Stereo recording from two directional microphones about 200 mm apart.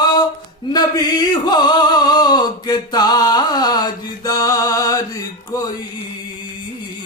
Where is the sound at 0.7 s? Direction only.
20° left (ahead or behind).